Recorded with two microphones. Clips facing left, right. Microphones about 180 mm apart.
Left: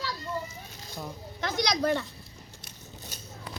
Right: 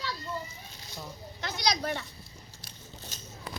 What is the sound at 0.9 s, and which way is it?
Speech, 50° left (ahead or behind).